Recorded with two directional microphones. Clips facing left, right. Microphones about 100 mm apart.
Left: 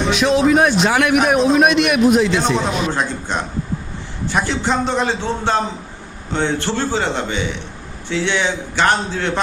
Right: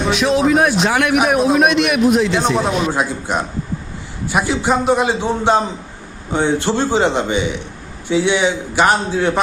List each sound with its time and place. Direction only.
0.1 s a man's voice: centre (ahead or behind)